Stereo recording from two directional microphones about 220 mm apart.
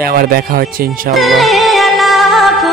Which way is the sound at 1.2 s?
Centre (ahead or behind).